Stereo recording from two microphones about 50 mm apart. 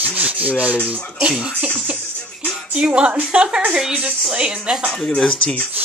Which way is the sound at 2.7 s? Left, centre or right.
Right.